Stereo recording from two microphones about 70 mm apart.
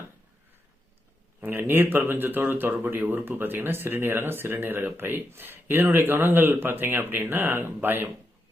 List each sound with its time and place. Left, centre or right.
1.4 s speech: right